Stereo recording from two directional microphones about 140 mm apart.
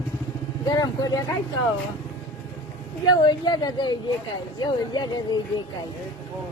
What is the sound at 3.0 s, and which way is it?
Speech, 30° left (ahead or behind).